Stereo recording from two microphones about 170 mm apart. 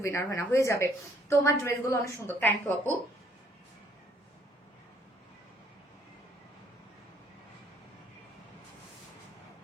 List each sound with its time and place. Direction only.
0.0 s a woman's voice: 15° left (ahead or behind)